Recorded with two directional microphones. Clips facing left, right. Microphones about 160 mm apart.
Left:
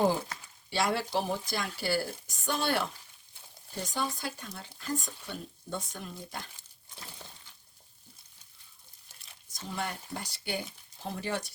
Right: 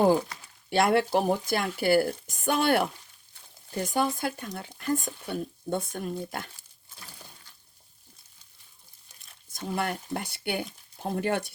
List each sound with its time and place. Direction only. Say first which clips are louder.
0.7 s speech: right 7 dB; 55° right (ahead or behind)
9.5 s speech: right 6 dB; 55° right (ahead or behind)